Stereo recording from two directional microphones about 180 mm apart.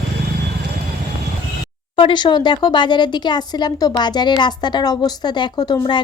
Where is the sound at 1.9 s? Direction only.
25° left (ahead or behind).